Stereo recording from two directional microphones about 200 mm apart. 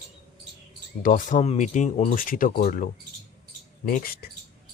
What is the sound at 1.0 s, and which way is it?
Speech, 40° left (ahead or behind).